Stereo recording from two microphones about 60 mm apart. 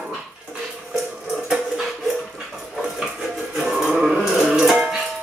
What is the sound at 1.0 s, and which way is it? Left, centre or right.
Water, centre.